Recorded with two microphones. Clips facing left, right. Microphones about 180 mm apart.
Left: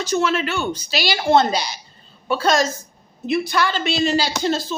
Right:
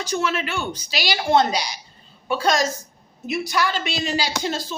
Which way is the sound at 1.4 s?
30° left (ahead or behind).